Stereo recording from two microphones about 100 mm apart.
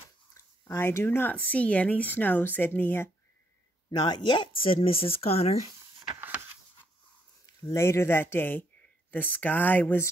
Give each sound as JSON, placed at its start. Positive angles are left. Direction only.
{"t": 0.3, "sound": "speech", "side_deg": 25}
{"t": 3.9, "sound": "speech", "side_deg": 45}
{"t": 7.4, "sound": "speech", "side_deg": 35}